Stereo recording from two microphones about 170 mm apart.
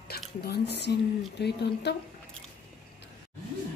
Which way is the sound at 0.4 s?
75° left (ahead or behind).